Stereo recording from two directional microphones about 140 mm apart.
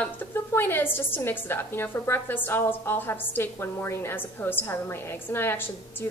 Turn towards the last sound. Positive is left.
turn(degrees=20)  # may be behind; listen again after turning